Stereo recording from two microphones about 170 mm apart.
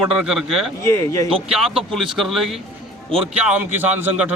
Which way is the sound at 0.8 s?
15° left (ahead or behind).